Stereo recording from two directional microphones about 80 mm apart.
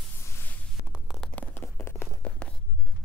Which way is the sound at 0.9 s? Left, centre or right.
Centre.